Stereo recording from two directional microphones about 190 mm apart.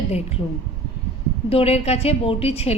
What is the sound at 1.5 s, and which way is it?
A woman's voice, 30° left (ahead or behind).